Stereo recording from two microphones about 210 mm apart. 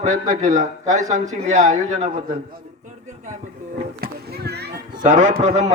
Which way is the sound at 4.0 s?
50° right (ahead or behind).